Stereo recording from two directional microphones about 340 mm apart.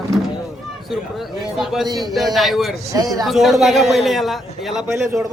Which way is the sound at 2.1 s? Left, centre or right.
Centre.